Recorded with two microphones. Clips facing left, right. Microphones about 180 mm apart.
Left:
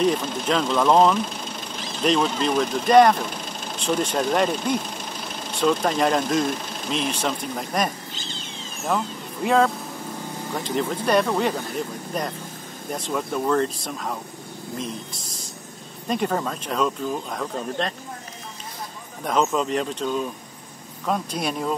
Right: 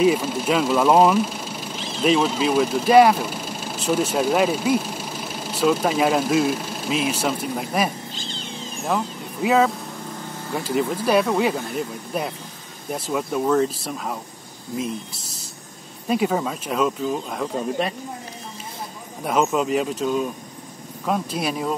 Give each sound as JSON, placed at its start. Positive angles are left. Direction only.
{"t": 0.0, "sound": "speech", "side_deg": -5}
{"t": 16.1, "sound": "speech", "side_deg": -5}
{"t": 19.2, "sound": "speech", "side_deg": -5}